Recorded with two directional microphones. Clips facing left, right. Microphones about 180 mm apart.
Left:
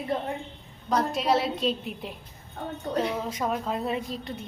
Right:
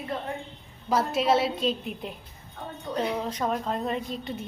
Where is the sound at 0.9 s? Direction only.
5° right (ahead or behind).